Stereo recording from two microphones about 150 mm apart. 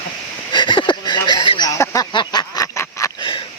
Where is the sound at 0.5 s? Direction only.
30° left (ahead or behind).